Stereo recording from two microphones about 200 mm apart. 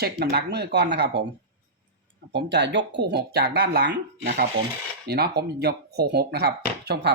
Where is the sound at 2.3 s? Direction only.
60° right (ahead or behind).